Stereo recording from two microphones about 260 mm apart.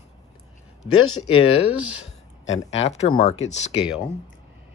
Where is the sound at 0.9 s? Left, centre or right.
Left.